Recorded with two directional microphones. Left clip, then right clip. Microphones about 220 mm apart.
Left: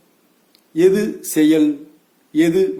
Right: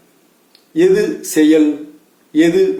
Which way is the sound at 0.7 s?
50° left (ahead or behind).